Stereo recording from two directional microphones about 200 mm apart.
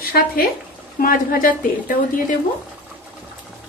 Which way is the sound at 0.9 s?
45° left (ahead or behind).